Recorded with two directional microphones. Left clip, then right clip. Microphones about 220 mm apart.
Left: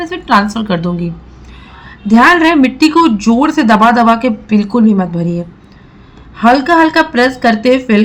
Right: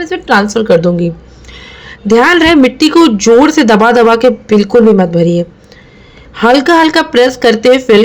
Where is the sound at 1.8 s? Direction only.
35° right (ahead or behind).